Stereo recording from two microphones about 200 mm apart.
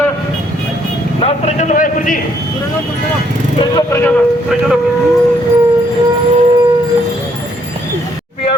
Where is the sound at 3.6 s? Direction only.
20° left (ahead or behind).